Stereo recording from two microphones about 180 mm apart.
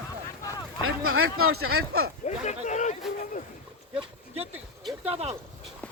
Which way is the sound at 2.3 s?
40° left (ahead or behind).